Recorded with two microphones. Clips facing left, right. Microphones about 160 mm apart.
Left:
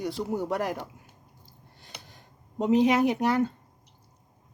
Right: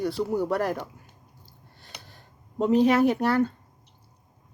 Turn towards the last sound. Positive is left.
turn(degrees=20)  # may be behind; listen again after turning